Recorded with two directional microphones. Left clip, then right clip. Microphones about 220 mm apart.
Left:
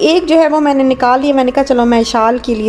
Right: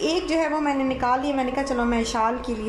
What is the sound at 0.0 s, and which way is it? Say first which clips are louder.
A woman's voice: left 14 dB; 40° left (ahead or behind).